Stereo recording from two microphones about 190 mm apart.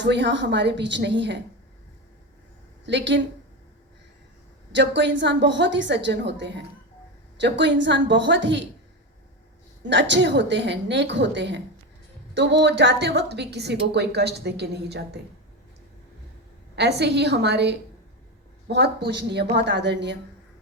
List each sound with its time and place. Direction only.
0.0 s a woman's voice: 70° right (ahead or behind)
2.8 s a woman's voice: 70° right (ahead or behind)
4.7 s a woman's voice: 70° right (ahead or behind)
9.9 s a woman's voice: 70° right (ahead or behind)
16.7 s a woman's voice: 60° right (ahead or behind)